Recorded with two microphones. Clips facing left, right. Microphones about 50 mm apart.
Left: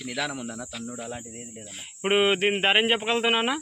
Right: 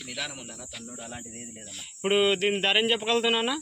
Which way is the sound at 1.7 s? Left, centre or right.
Left.